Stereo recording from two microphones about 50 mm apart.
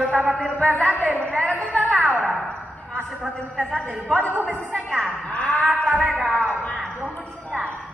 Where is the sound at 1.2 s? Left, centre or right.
Centre.